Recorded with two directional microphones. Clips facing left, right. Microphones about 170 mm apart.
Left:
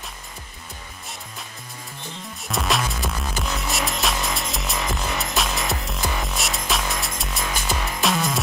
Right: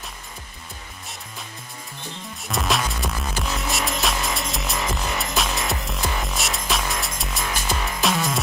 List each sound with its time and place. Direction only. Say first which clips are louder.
2.4 s music: even; centre (ahead or behind)